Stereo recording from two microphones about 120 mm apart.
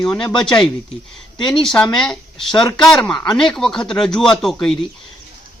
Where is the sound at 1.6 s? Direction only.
5° left (ahead or behind).